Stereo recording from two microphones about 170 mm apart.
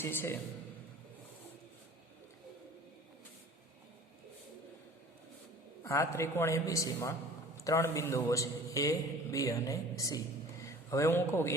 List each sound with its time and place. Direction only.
0.0 s a man's voice: 15° left (ahead or behind)
5.8 s a man's voice: 15° left (ahead or behind)